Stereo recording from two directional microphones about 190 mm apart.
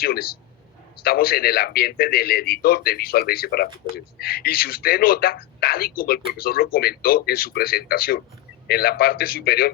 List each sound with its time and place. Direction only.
0.0 s speech: 50° left (ahead or behind)